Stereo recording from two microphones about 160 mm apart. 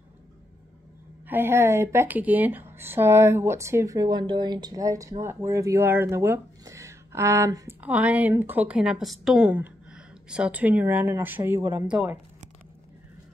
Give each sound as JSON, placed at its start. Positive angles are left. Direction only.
{"t": 1.2, "sound": "speech", "side_deg": -15}